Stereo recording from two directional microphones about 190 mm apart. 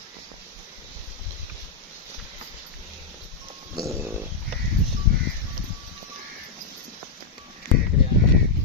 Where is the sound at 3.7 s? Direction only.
15° right (ahead or behind).